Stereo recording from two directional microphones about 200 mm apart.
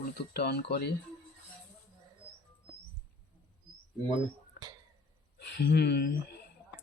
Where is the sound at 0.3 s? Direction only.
55° left (ahead or behind).